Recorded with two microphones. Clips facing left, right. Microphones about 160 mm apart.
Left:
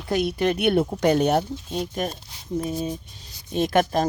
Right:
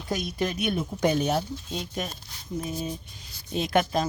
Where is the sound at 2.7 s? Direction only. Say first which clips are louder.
Left 5 dB; 25° left (ahead or behind).